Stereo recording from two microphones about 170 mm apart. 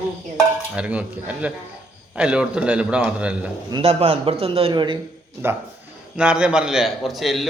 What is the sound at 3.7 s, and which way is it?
A man's voice, 30° right (ahead or behind).